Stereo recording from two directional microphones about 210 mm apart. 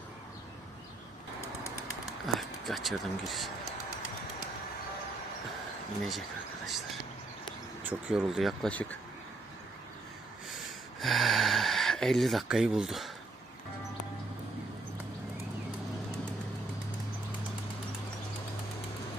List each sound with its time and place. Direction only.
2.2 s speech: centre (ahead or behind)
7.8 s speech: 5° right (ahead or behind)
10.5 s gasp: centre (ahead or behind)